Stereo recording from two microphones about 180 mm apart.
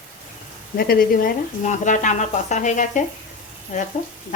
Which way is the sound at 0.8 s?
55° left (ahead or behind).